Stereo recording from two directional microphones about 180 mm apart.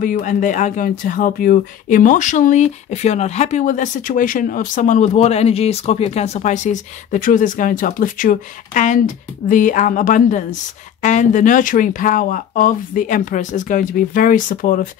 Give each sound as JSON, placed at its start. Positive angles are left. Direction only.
{"t": 0.0, "sound": "speech", "side_deg": 45}